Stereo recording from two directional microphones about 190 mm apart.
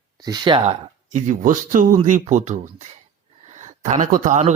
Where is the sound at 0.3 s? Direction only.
25° right (ahead or behind).